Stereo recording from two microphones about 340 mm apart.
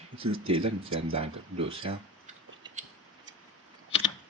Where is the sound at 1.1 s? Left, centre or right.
Centre.